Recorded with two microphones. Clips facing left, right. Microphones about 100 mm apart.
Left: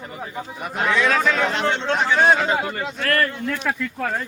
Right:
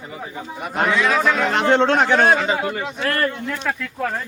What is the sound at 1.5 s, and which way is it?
Speech, 50° right (ahead or behind).